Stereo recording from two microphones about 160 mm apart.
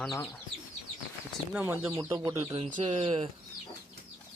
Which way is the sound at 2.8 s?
40° right (ahead or behind).